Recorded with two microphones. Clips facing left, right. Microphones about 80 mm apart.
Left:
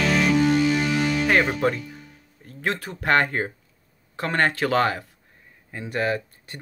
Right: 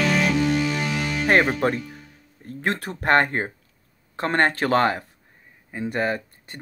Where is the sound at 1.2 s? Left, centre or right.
Right.